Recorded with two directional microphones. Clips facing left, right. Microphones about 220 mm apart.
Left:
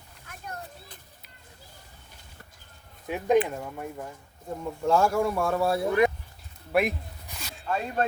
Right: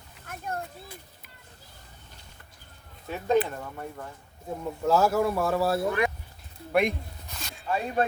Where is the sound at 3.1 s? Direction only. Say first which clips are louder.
Left 2 dB; 15° left (ahead or behind).